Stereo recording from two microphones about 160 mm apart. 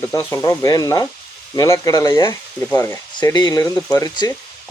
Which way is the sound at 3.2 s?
25° left (ahead or behind).